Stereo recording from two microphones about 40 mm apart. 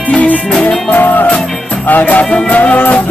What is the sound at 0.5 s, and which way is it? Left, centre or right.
Music, centre.